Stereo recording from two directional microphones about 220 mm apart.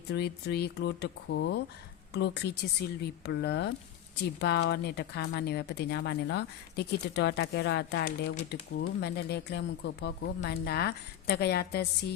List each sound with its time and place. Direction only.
0.1 s speech: 50° left (ahead or behind)